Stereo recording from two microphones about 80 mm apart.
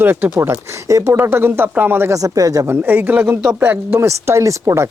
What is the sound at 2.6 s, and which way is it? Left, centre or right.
Speech, right.